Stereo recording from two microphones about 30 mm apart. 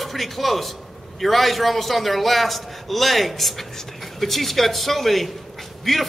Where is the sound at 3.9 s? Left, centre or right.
Centre.